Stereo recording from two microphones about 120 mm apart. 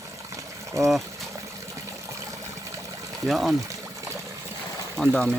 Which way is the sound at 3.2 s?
Centre (ahead or behind).